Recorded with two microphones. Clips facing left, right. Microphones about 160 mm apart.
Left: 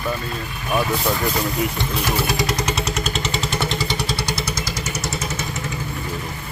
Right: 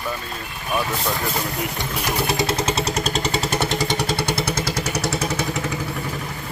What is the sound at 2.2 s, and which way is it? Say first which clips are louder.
Vehicle: right 1 dB; 25° right (ahead or behind).